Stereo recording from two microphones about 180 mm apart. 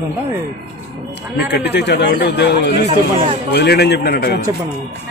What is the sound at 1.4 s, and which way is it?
A man's voice, 70° left (ahead or behind).